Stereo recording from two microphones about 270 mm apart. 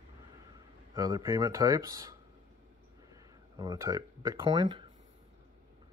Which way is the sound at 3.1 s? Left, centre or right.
Centre.